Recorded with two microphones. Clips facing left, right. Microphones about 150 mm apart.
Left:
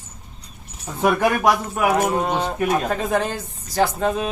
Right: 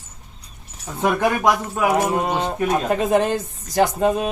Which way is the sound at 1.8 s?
10° right (ahead or behind).